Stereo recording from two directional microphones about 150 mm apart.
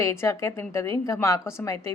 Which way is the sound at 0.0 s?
20° left (ahead or behind).